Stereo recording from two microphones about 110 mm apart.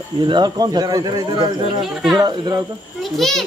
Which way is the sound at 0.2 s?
45° right (ahead or behind).